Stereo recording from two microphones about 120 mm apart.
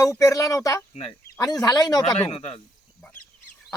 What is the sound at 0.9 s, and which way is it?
Speech, 60° left (ahead or behind).